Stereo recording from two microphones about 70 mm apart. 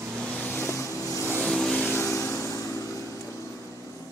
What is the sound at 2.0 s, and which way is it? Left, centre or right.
Vehicle, left.